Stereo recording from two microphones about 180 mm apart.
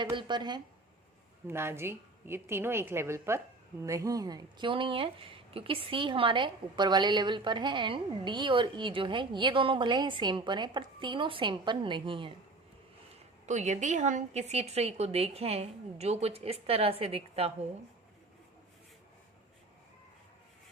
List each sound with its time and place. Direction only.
0.0 s speech: 25° right (ahead or behind)
1.5 s a woman's voice: 15° right (ahead or behind)
13.4 s a woman's voice: 40° right (ahead or behind)